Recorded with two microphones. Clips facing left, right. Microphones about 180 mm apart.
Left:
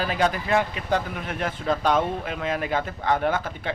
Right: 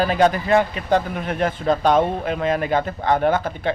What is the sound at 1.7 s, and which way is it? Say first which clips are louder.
Speech: right 5 dB; 35° right (ahead or behind).